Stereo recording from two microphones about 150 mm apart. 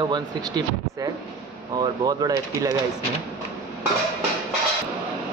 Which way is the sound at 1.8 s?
25° right (ahead or behind).